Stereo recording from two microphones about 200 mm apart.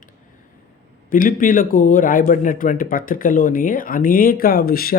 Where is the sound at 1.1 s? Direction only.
45° left (ahead or behind).